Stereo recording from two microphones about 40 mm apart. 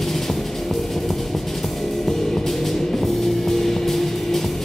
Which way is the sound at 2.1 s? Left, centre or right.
Centre.